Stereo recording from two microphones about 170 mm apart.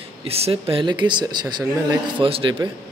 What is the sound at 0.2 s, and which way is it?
A man's voice, 35° right (ahead or behind).